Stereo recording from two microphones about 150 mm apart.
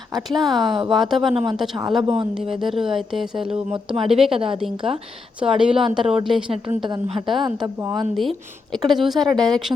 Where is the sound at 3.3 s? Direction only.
35° right (ahead or behind).